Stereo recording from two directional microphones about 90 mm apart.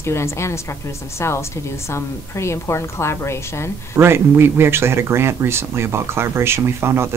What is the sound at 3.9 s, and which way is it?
Speech, 30° right (ahead or behind).